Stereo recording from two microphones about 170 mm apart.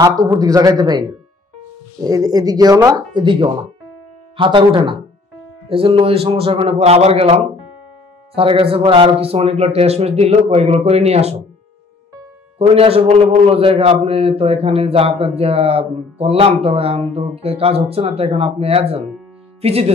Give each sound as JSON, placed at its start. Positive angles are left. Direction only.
{"t": 0.2, "sound": "a man's voice", "side_deg": -20}
{"t": 12.5, "sound": "a man's voice", "side_deg": -35}